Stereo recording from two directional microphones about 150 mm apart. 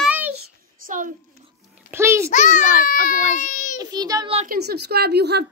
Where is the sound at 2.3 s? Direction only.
55° left (ahead or behind).